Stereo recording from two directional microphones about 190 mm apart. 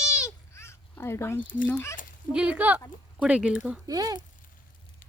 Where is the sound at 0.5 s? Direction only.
15° left (ahead or behind).